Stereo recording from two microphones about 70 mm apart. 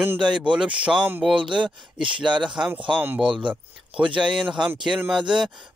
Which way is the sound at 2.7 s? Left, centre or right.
Right.